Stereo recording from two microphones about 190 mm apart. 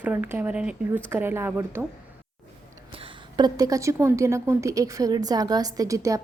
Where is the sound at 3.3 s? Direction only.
20° right (ahead or behind).